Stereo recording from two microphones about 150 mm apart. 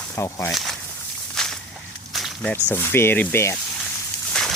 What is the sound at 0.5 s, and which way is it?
Speech, centre (ahead or behind).